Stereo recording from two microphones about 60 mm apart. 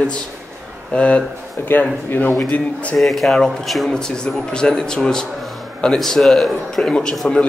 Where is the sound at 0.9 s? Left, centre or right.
Left.